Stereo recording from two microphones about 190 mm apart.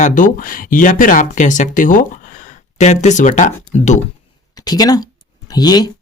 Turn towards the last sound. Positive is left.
turn(degrees=20)  # may be behind; listen again after turning